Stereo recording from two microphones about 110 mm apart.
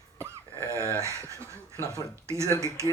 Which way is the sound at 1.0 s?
25° right (ahead or behind).